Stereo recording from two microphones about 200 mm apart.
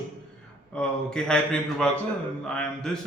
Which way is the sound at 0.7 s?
5° left (ahead or behind).